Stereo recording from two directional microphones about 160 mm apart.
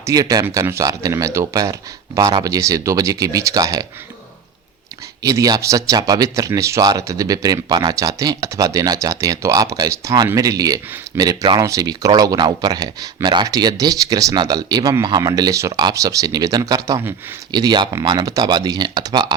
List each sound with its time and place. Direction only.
0.0 s speech: 20° right (ahead or behind)
5.2 s speech: 20° right (ahead or behind)